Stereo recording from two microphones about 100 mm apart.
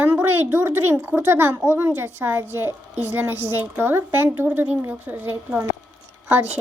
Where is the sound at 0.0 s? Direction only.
20° right (ahead or behind).